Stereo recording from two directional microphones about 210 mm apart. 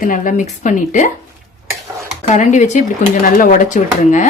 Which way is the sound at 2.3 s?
35° left (ahead or behind).